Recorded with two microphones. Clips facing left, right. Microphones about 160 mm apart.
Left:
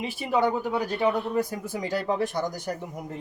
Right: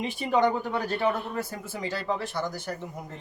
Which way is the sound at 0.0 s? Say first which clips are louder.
Right 1 dB; 5° left (ahead or behind).